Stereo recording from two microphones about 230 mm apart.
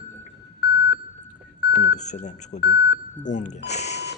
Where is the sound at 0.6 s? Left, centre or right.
Left.